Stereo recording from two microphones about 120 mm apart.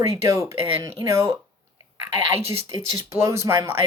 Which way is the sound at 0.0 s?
25° right (ahead or behind).